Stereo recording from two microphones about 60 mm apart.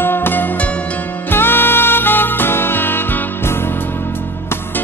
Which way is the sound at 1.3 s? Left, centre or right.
Left.